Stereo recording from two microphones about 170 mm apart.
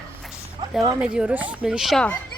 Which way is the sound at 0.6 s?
30° right (ahead or behind).